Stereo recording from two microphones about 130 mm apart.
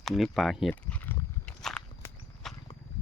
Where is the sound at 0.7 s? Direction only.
10° left (ahead or behind).